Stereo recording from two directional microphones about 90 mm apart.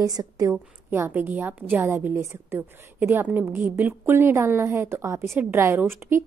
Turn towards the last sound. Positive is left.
turn(degrees=-25)  # may be behind; listen again after turning